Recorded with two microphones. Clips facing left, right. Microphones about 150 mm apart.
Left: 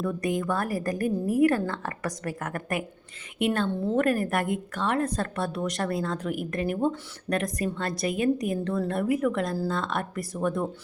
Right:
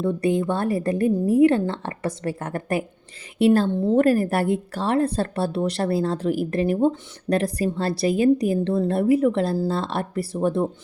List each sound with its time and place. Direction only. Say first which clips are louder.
0.0 s a woman's voice: right 6 dB; 30° right (ahead or behind)